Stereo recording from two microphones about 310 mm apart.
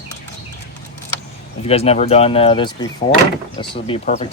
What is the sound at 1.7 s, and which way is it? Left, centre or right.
Speech, centre.